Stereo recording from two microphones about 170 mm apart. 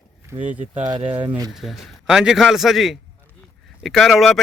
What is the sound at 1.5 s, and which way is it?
A man's voice, centre (ahead or behind).